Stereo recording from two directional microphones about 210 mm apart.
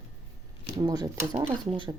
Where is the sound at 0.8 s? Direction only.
15° right (ahead or behind).